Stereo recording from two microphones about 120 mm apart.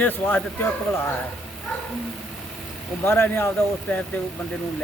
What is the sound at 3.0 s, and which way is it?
Speech, 20° left (ahead or behind).